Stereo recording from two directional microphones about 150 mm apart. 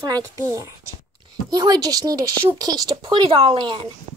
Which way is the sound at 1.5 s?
25° right (ahead or behind).